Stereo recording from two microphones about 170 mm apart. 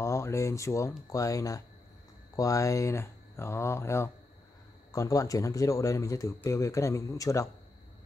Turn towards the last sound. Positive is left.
turn(degrees=20)  # may be behind; listen again after turning